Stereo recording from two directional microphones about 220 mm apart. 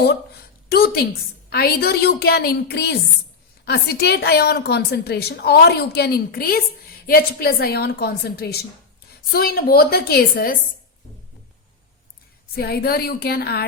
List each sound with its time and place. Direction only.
0.7 s a woman's voice: 45° left (ahead or behind)
12.5 s a woman's voice: 45° left (ahead or behind)